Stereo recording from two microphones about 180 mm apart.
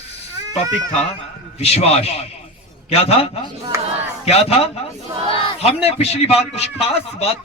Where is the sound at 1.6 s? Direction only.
35° left (ahead or behind).